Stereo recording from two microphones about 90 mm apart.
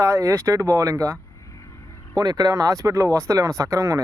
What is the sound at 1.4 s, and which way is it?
Vehicle, 35° left (ahead or behind).